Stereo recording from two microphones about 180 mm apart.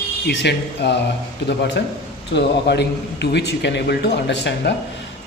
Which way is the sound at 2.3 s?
70° left (ahead or behind).